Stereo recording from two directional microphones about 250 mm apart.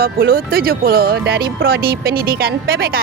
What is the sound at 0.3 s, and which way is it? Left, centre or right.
Speech, right.